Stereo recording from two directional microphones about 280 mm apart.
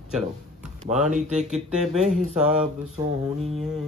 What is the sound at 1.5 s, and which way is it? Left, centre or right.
Speech, centre.